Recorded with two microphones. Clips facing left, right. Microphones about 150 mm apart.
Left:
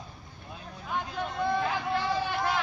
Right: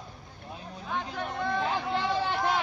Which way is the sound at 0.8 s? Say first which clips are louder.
Left 1 dB; 10° left (ahead or behind).